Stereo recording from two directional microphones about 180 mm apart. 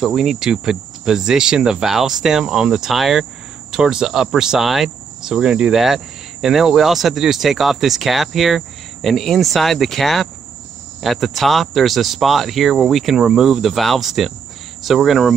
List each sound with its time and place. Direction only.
0.0 s speech: centre (ahead or behind)